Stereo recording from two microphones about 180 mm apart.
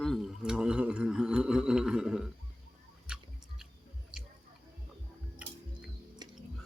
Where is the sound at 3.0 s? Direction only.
5° right (ahead or behind).